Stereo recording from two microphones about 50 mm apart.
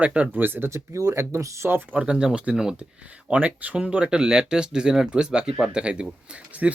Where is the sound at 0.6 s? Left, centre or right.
Right.